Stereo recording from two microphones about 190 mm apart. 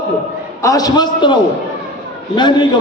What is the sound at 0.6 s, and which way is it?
Speech, 20° left (ahead or behind).